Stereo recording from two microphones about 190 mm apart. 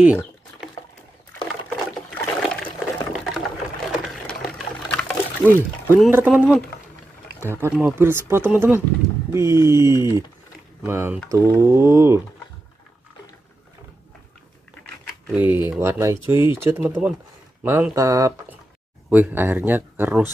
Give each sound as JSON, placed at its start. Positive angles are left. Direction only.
{"t": 1.4, "sound": "water", "side_deg": 0}
{"t": 2.8, "sound": "liquid", "side_deg": -5}
{"t": 3.9, "sound": "a sound", "side_deg": 0}
{"t": 5.4, "sound": "speech", "side_deg": -10}
{"t": 15.3, "sound": "speech", "side_deg": -10}